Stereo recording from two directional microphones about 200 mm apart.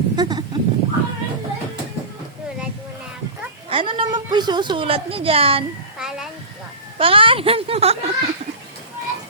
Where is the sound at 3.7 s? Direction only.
25° right (ahead or behind).